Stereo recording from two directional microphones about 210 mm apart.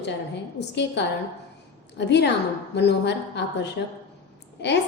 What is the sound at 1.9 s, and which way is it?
A woman's voice, 55° left (ahead or behind).